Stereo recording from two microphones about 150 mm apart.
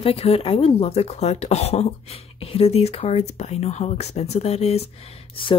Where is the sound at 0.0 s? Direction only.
40° left (ahead or behind).